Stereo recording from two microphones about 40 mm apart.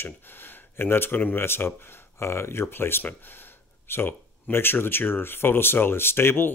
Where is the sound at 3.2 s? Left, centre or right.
Left.